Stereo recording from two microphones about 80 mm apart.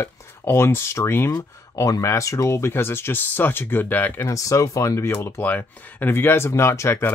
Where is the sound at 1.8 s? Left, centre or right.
Left.